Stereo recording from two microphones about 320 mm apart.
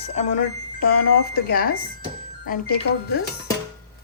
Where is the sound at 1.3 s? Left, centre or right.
Left.